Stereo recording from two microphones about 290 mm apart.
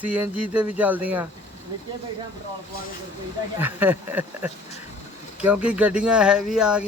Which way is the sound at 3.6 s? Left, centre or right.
Centre.